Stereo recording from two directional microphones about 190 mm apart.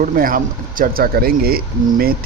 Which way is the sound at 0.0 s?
45° right (ahead or behind).